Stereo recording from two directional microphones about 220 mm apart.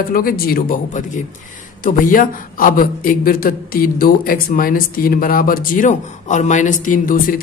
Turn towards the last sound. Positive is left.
turn(degrees=40)  # may be behind; listen again after turning